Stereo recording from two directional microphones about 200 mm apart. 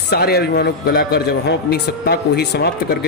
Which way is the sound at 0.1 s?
55° left (ahead or behind).